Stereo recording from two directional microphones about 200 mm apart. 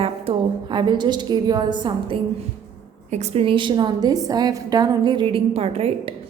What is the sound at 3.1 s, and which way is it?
A woman's voice, 30° right (ahead or behind).